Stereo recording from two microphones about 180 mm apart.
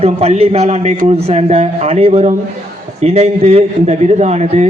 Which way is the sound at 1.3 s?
35° right (ahead or behind).